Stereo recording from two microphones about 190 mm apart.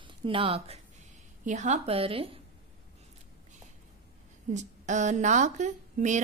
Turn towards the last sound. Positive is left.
turn(degrees=-40)  # may be behind; listen again after turning